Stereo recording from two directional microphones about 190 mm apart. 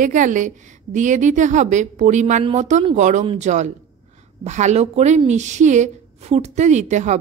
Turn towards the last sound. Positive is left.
turn(degrees=-40)  # may be behind; listen again after turning